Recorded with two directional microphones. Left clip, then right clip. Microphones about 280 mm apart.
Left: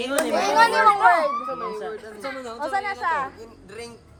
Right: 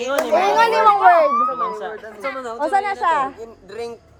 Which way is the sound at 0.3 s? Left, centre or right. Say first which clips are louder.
Right 3 dB; right.